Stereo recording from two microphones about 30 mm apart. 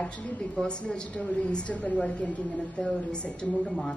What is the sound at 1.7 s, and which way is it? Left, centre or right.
A woman's voice, left.